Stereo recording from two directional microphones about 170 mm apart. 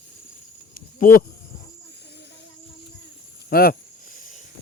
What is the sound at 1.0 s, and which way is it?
Speech, 55° left (ahead or behind).